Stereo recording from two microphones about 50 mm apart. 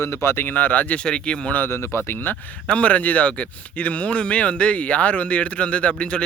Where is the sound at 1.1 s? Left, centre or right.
Centre.